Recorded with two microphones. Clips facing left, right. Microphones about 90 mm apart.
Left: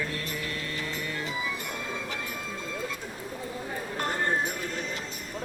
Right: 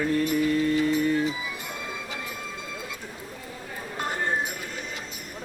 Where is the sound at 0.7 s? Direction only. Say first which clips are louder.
Right 12 dB; 15° right (ahead or behind).